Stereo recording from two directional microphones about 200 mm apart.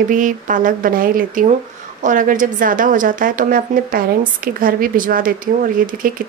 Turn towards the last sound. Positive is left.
turn(degrees=-45)  # may be behind; listen again after turning